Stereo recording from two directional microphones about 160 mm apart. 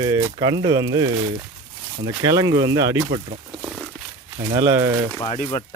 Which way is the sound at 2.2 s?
20° right (ahead or behind).